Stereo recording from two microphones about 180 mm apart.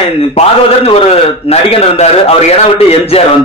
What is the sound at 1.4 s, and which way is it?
A man's voice, 35° left (ahead or behind).